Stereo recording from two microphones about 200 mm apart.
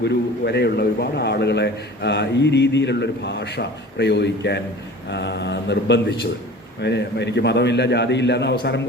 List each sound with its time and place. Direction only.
0.0 s a man's voice: 55° left (ahead or behind)